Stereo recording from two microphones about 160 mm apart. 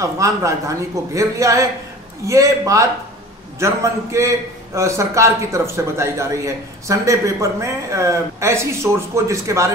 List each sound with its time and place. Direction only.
0.0 s a man's voice: 20° right (ahead or behind)